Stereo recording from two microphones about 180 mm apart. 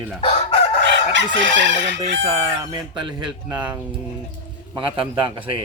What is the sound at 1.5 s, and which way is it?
Chicken, 90° right.